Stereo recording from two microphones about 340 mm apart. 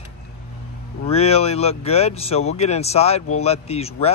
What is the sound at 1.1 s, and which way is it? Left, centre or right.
Speech, centre.